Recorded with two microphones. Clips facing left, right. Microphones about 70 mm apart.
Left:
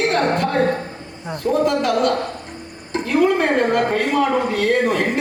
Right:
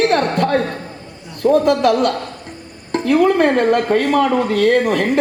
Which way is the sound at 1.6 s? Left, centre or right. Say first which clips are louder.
Right 3 dB; right.